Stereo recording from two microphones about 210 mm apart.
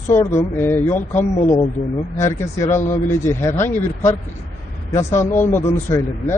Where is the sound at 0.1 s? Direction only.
10° left (ahead or behind).